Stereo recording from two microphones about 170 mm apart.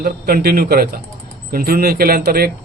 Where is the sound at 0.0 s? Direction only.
65° right (ahead or behind).